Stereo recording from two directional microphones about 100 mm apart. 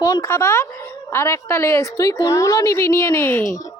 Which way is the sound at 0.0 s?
40° left (ahead or behind).